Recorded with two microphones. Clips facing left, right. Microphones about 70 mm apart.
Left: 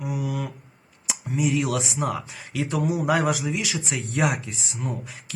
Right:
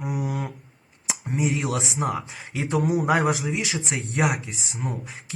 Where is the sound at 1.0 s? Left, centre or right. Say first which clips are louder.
Even; right.